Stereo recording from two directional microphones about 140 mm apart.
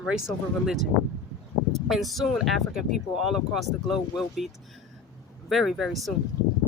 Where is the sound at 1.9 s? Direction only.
Centre (ahead or behind).